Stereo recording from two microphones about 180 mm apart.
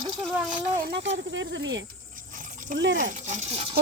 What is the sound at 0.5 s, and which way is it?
Speech, 55° right (ahead or behind).